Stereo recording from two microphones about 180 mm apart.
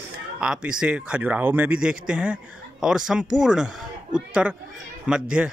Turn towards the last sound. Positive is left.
turn(degrees=-5)  # may be behind; listen again after turning